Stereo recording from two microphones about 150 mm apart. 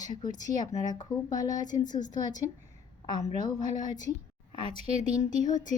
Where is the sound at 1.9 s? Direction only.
55° left (ahead or behind).